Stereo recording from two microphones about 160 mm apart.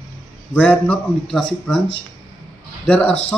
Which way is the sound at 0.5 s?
10° left (ahead or behind).